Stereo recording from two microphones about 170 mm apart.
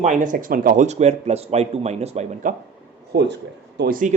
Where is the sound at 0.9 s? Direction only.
40° right (ahead or behind).